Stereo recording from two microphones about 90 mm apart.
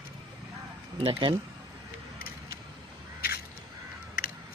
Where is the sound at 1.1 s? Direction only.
60° right (ahead or behind).